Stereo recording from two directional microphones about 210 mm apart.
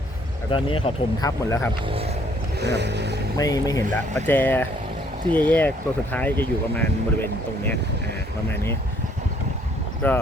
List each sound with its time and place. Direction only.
0.5 s speech: 25° left (ahead or behind)
1.9 s speech: 25° right (ahead or behind)
2.6 s vehicle: 55° right (ahead or behind)
3.3 s speech: 15° left (ahead or behind)
10.0 s speech: 10° left (ahead or behind)